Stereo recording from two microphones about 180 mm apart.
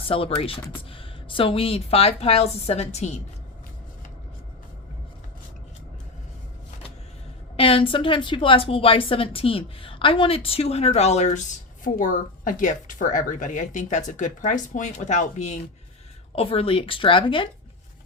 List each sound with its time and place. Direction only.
0.1 s a woman's voice: 30° left (ahead or behind)
7.5 s a woman's voice: 30° left (ahead or behind)